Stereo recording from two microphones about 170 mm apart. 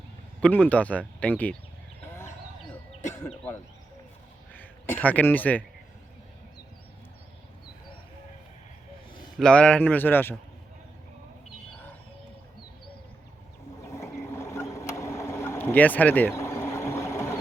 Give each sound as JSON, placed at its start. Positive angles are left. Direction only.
{"t": 0.7, "sound": "a man's voice", "side_deg": 10}
{"t": 4.5, "sound": "speech", "side_deg": 10}
{"t": 9.4, "sound": "a man's voice", "side_deg": 5}
{"t": 13.8, "sound": "boat", "side_deg": 15}